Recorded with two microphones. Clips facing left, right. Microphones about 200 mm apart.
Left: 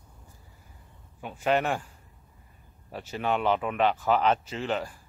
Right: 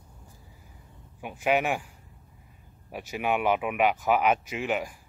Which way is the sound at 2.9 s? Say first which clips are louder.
Right 1 dB; 10° right (ahead or behind).